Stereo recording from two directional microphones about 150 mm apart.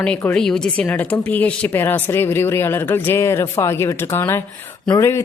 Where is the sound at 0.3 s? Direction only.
5° left (ahead or behind).